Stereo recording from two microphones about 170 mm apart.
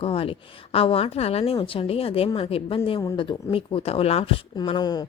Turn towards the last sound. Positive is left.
turn(degrees=25)  # may be behind; listen again after turning